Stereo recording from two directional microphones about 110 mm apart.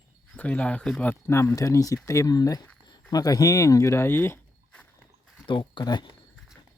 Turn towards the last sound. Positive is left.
turn(degrees=40)  # may be behind; listen again after turning